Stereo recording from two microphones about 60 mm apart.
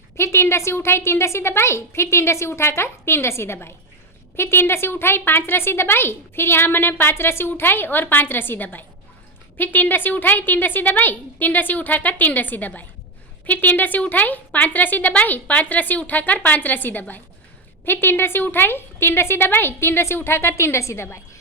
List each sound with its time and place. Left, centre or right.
0.2 s a woman's voice: left